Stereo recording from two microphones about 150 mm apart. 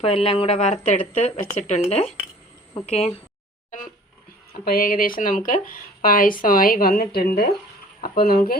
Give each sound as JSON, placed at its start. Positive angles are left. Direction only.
{"t": 0.0, "sound": "a woman's voice", "side_deg": 40}
{"t": 3.7, "sound": "a sound", "side_deg": 60}
{"t": 4.5, "sound": "speech", "side_deg": 85}